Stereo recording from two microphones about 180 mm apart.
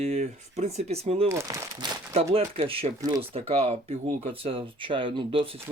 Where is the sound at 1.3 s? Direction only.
15° right (ahead or behind).